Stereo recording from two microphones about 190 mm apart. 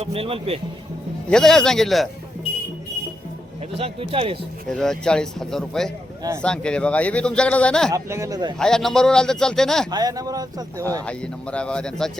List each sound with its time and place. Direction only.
0.0 s a man's voice: 30° right (ahead or behind)
1.3 s a man's voice: 5° left (ahead or behind)
3.8 s speech: 30° right (ahead or behind)
4.7 s a man's voice: 5° left (ahead or behind)
7.9 s speech: 15° right (ahead or behind)
8.5 s a man's voice: 5° left (ahead or behind)
9.9 s speech: 20° right (ahead or behind)
11.5 s a man's voice: 5° left (ahead or behind)